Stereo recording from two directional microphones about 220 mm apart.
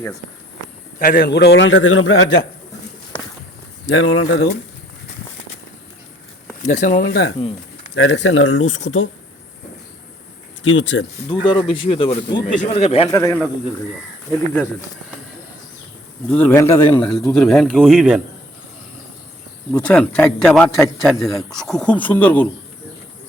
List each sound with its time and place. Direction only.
0.9 s a man's voice: 40° left (ahead or behind); by 2.4 s 60° left (ahead or behind)
3.8 s speech: 65° left (ahead or behind)
6.6 s speech: 35° left (ahead or behind)
7.9 s a man's voice: 60° left (ahead or behind)
10.6 s speech: 60° left (ahead or behind)
11.3 s speech: 20° left (ahead or behind)
13.1 s a man's voice: 15° left (ahead or behind)
16.3 s a man's voice: 10° left (ahead or behind)
19.7 s a man's voice: 5° left (ahead or behind)